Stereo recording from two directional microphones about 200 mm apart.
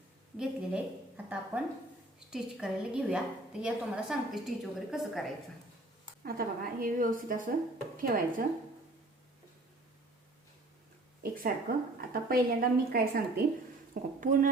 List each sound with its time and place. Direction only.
0.3 s a woman's voice: 5° right (ahead or behind)
6.2 s a woman's voice: 45° right (ahead or behind)
11.2 s a sound: 45° right (ahead or behind)
11.9 s a woman's voice: 45° right (ahead or behind)